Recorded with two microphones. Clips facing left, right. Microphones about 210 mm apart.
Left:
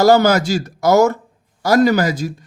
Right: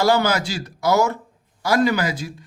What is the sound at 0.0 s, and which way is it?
A man's voice, 40° left (ahead or behind).